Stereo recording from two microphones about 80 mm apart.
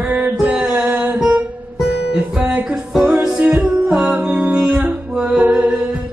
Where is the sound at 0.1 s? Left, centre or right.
Centre.